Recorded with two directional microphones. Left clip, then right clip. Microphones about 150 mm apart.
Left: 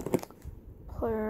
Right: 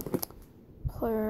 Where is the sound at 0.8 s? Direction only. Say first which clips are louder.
Right 1 dB; 5° right (ahead or behind).